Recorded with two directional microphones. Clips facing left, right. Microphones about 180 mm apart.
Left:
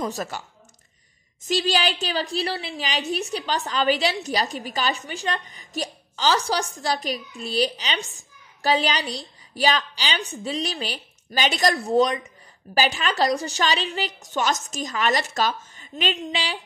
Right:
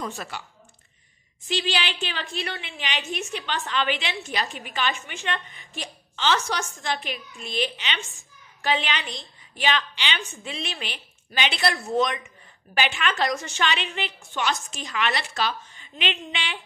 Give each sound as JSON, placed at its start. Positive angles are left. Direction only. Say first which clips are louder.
{"t": 0.0, "sound": "a woman's voice", "louder": "left 5 dB", "side_deg": 40}
{"t": 1.4, "sound": "a woman's voice", "louder": "left 5 dB", "side_deg": 40}